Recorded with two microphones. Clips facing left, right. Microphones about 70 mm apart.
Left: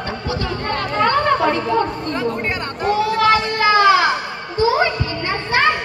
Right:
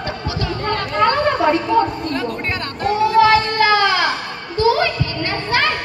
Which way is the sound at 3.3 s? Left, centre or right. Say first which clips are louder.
Right 1 dB; centre.